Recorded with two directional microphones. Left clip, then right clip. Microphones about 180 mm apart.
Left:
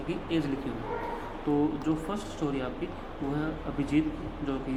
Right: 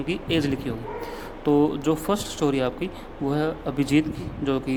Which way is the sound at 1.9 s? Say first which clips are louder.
Right 8 dB; 60° right (ahead or behind).